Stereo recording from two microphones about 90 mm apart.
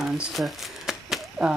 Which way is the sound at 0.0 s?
Centre (ahead or behind).